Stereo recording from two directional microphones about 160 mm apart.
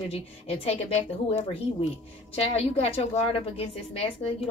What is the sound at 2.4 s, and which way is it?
A woman's voice, 40° left (ahead or behind).